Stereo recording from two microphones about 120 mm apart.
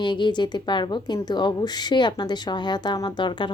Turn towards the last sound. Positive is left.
turn(degrees=40)  # may be behind; listen again after turning